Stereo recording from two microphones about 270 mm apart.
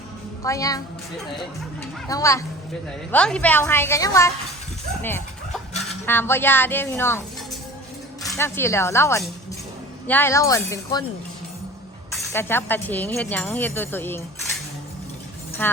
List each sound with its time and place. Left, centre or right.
0.4 s speech: centre
2.0 s speech: centre
5.9 s speech: centre
8.3 s speech: centre
12.1 s speech: centre
15.6 s speech: centre